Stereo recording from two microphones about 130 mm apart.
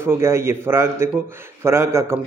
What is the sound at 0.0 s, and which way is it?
A man's voice, 20° right (ahead or behind).